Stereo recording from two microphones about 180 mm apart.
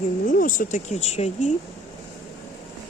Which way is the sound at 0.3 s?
50° left (ahead or behind).